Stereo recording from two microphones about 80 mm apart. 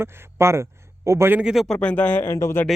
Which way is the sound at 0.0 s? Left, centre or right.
Right.